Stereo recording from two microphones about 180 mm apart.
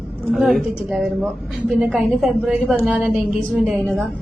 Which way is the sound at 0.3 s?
Centre (ahead or behind).